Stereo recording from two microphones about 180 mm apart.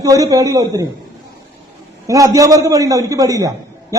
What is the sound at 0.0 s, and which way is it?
Speech, 20° right (ahead or behind).